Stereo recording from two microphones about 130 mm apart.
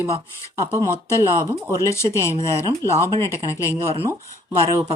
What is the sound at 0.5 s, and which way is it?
Speech, 25° right (ahead or behind).